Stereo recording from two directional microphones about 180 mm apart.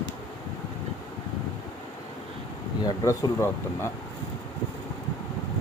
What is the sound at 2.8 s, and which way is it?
Speech, 20° left (ahead or behind).